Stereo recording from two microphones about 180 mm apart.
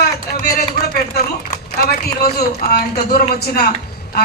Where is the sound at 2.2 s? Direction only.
60° left (ahead or behind).